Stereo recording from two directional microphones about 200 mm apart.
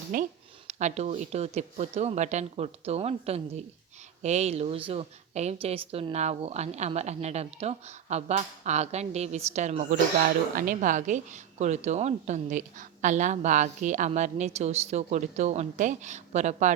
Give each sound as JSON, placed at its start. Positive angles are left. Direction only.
{"t": 0.1, "sound": "a woman's voice", "side_deg": -45}